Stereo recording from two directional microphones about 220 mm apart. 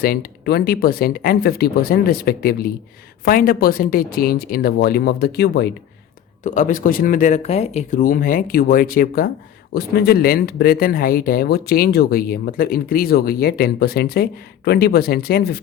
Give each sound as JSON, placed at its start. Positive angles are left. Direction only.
{"t": 0.0, "sound": "speech", "side_deg": 40}
{"t": 6.4, "sound": "speech", "side_deg": 35}